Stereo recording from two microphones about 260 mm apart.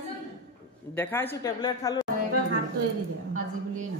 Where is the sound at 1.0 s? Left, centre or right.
Centre.